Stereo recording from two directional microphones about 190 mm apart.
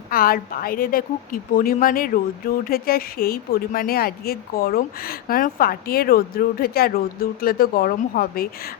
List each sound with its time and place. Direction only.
0.1 s speech: 50° left (ahead or behind)